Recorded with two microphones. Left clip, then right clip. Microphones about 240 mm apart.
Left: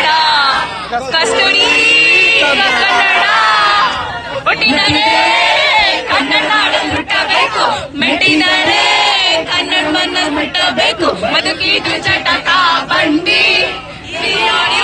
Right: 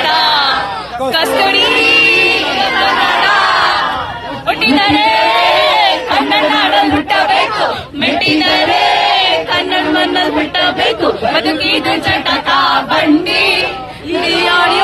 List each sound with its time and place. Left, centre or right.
1.1 s music: centre
4.5 s speech: centre
5.7 s music: centre
9.2 s speech: centre